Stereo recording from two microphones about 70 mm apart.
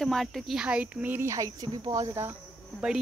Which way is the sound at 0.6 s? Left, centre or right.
Centre.